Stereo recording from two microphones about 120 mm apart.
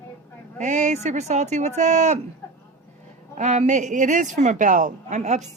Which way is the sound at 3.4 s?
80° right.